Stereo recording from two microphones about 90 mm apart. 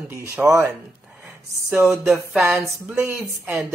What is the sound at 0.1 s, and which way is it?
Speech, 30° right (ahead or behind).